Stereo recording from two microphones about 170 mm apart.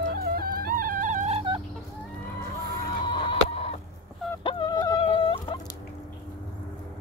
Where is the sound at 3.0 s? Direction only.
30° left (ahead or behind).